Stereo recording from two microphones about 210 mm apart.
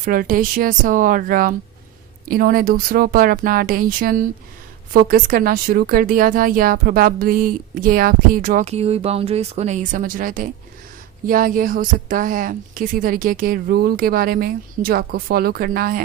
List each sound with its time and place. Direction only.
0.0 s a woman's voice: 40° right (ahead or behind)